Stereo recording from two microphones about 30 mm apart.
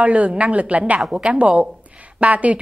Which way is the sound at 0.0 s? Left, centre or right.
Right.